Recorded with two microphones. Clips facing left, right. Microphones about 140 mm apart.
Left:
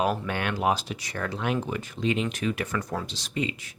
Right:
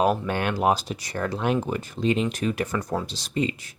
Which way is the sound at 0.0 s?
40° right (ahead or behind).